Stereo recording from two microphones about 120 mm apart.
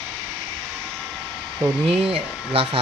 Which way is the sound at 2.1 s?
50° right (ahead or behind).